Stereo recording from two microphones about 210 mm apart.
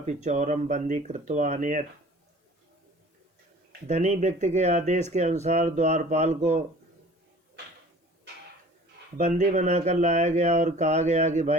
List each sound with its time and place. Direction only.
0.0 s speech: 35° right (ahead or behind)
3.8 s speech: 30° right (ahead or behind)
9.1 s speech: 35° right (ahead or behind)